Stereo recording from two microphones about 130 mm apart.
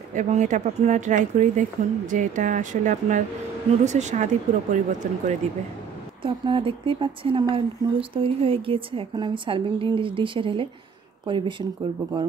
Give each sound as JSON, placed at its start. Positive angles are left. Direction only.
{"t": 0.1, "sound": "speech", "side_deg": -65}
{"t": 3.8, "sound": "speech", "side_deg": -65}
{"t": 6.2, "sound": "speech", "side_deg": -40}